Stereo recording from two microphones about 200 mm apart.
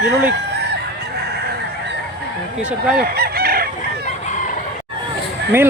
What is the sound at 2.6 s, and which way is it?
Speech, 5° right (ahead or behind).